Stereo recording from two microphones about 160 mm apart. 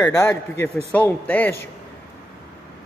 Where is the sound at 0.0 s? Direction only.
20° left (ahead or behind).